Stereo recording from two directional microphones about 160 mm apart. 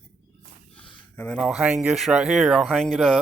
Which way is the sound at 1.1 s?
5° left (ahead or behind).